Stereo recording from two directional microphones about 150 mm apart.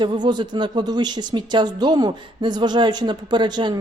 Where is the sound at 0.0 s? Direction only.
30° right (ahead or behind).